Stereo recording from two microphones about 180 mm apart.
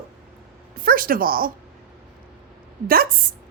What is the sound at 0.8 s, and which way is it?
Speech, 55° right (ahead or behind).